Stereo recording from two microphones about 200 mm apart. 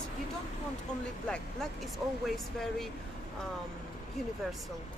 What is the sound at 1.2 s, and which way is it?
Speech, 5° left (ahead or behind).